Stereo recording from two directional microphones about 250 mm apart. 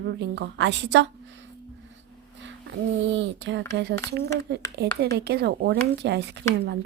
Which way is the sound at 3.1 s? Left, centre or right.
Right.